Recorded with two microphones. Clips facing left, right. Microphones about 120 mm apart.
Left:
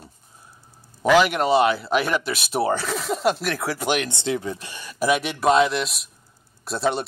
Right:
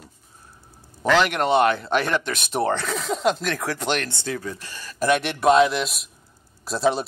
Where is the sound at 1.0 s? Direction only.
5° left (ahead or behind).